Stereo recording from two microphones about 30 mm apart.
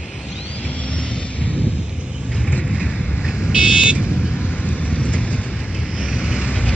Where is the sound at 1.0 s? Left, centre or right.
Left.